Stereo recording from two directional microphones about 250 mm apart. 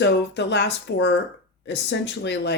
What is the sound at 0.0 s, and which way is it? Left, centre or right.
Speech, left.